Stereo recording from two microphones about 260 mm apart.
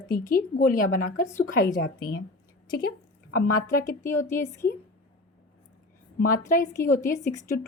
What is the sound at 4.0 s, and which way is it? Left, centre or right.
Speech, centre.